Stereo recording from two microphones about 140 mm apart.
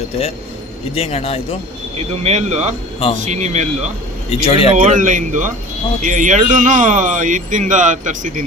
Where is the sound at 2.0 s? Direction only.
50° right (ahead or behind).